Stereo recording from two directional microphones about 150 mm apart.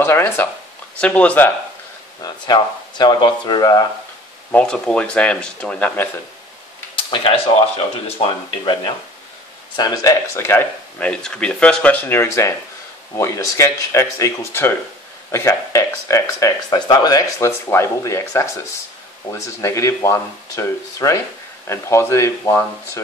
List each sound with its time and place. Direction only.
0.0 s speech: 15° left (ahead or behind)
2.2 s speech: 30° left (ahead or behind)
4.5 s speech: 10° left (ahead or behind)
7.0 s speech: 40° left (ahead or behind)
9.8 s speech: 25° left (ahead or behind)